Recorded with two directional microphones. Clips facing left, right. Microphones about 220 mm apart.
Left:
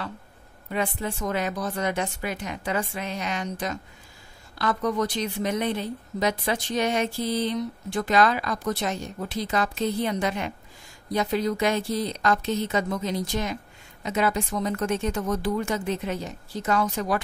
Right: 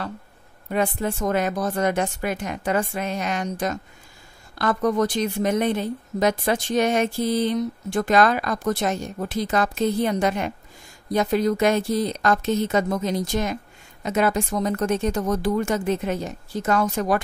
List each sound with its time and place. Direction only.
0.7 s a woman's voice: 45° right (ahead or behind)